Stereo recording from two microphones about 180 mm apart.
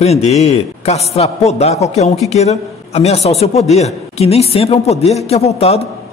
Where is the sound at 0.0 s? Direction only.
35° left (ahead or behind).